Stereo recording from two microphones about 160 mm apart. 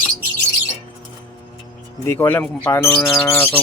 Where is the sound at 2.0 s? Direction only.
15° left (ahead or behind).